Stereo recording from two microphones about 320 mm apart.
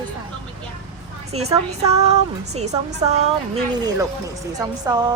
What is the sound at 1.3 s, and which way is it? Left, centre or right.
A woman's voice, centre.